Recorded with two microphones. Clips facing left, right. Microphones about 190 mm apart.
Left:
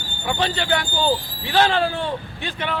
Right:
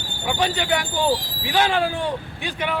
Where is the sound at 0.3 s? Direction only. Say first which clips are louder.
Even; 10° right (ahead or behind).